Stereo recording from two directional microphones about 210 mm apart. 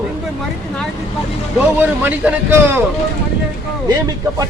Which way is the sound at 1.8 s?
10° right (ahead or behind).